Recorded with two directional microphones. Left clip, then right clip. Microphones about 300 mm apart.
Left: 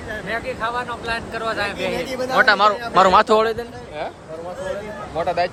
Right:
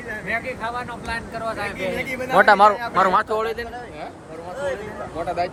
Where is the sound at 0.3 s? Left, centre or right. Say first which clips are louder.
Left 2 dB; centre.